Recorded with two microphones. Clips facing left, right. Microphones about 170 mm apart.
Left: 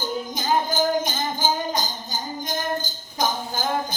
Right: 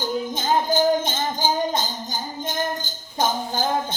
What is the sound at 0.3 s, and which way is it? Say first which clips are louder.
Music: right 2 dB; 20° right (ahead or behind).